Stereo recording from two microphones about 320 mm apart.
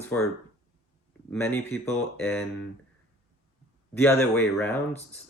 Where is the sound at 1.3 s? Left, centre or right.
Centre.